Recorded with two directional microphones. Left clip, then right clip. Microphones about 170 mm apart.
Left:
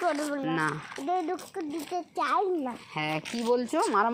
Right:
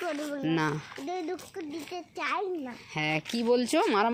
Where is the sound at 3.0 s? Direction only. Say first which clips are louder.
Right 2 dB; 25° right (ahead or behind).